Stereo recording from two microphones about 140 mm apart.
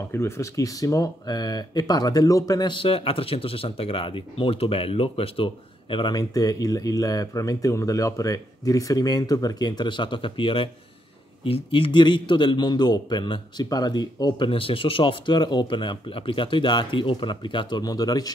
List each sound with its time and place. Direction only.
0.1 s a man's voice: 20° left (ahead or behind)